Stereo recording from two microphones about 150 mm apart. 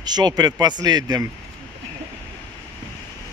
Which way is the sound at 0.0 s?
25° right (ahead or behind).